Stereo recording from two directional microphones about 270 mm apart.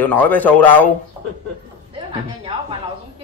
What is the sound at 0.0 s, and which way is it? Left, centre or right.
Speech, centre.